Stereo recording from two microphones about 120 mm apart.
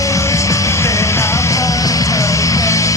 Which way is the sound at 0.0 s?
25° left (ahead or behind).